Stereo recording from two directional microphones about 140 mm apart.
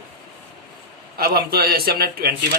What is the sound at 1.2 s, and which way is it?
Speech, 90° right.